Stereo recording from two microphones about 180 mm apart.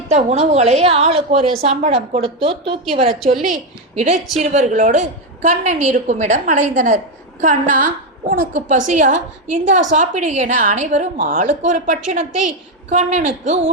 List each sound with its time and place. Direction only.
0.1 s a woman's voice: 35° right (ahead or behind)